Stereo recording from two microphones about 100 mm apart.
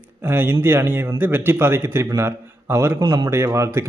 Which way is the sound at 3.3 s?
30° right (ahead or behind).